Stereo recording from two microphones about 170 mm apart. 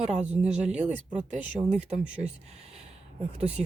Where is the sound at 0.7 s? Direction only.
45° right (ahead or behind).